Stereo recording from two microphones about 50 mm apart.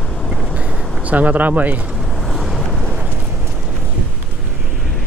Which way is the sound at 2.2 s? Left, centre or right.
Centre.